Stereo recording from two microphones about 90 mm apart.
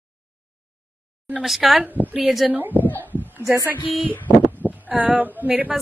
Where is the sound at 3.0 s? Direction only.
25° right (ahead or behind).